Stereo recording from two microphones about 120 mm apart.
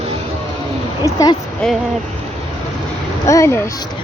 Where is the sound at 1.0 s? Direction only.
25° left (ahead or behind).